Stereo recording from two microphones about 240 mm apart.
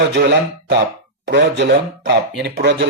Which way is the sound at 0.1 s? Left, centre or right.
Right.